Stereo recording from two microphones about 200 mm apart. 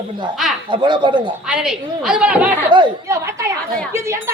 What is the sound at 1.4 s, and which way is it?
Speech, 5° right (ahead or behind).